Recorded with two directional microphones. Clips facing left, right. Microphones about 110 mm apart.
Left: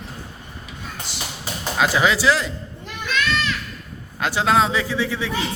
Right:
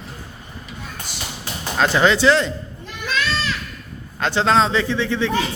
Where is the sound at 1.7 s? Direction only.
5° left (ahead or behind).